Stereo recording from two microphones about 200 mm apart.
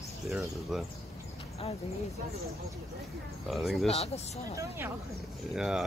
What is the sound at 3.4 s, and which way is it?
Speech, centre (ahead or behind).